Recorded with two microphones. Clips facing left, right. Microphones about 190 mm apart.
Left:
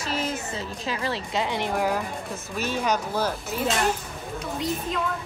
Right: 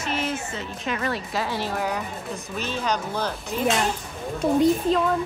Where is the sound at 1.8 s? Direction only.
5° left (ahead or behind).